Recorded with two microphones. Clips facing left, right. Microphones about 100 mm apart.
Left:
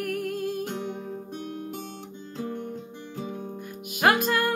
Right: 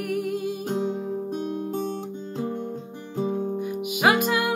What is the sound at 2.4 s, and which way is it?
Music, 25° right (ahead or behind).